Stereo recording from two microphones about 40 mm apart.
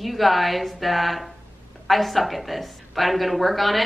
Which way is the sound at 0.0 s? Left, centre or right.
Centre.